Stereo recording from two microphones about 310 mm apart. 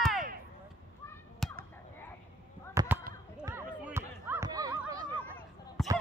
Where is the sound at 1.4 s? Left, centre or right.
Centre.